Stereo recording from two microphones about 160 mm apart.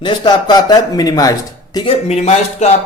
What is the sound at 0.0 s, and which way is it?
Speech, 30° left (ahead or behind).